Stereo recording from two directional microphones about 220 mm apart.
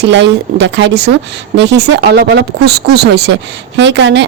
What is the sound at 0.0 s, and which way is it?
Speech, 55° right (ahead or behind).